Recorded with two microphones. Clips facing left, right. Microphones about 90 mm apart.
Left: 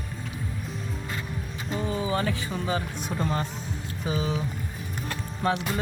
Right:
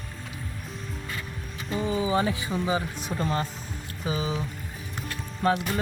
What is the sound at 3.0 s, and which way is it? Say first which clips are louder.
Speech: even; centre (ahead or behind).